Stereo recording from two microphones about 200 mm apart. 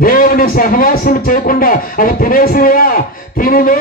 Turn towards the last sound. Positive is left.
turn(degrees=45)  # may be behind; listen again after turning